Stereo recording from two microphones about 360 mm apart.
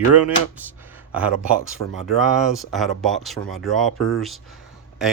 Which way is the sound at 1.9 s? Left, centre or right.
Centre.